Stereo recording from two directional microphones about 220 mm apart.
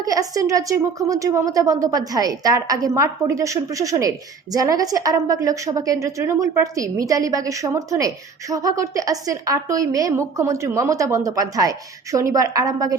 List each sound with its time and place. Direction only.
0.0 s a woman's voice: 15° right (ahead or behind)